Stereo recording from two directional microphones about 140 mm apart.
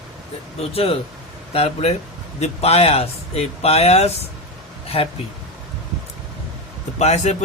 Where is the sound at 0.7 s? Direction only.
45° left (ahead or behind).